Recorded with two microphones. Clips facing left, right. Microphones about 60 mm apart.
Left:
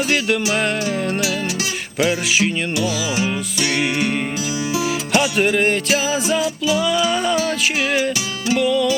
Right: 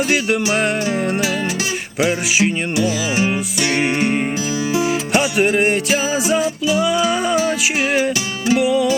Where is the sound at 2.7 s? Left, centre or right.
Right.